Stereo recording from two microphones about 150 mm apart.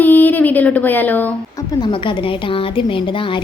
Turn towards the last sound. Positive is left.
turn(degrees=35)  # may be behind; listen again after turning